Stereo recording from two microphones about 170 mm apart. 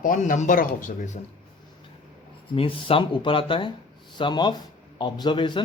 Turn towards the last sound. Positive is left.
turn(degrees=25)  # may be behind; listen again after turning